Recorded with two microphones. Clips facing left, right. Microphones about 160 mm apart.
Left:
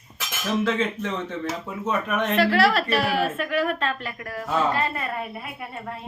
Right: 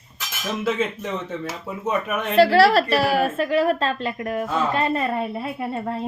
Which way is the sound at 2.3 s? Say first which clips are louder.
Right 6 dB; 30° right (ahead or behind).